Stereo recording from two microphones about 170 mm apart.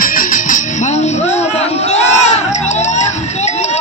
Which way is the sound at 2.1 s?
40° left (ahead or behind).